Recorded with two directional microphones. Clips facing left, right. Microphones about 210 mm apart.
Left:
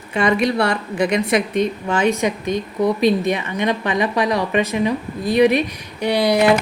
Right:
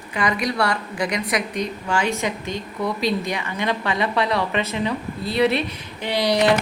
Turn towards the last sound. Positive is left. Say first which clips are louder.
# left 4 dB
turn(degrees=10)  # may be behind; listen again after turning